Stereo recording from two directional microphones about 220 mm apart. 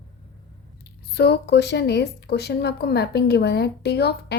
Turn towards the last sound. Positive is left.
turn(degrees=50)  # may be behind; listen again after turning